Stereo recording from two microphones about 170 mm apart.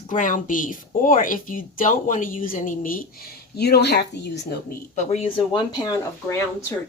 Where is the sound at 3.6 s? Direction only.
75° left (ahead or behind).